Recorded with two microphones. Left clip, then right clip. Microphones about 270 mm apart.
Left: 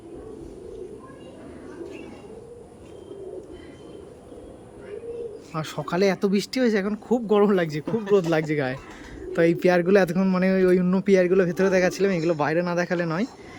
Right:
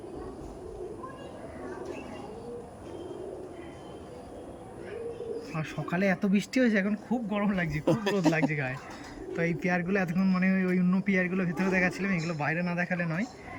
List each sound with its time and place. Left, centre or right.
5.5 s speech: centre